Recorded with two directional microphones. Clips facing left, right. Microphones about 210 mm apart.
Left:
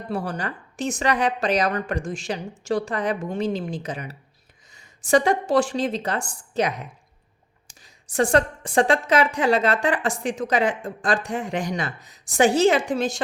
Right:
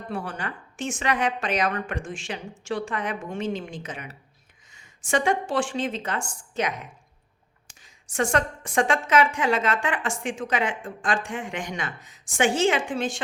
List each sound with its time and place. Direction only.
0.1 s a woman's voice: 40° left (ahead or behind)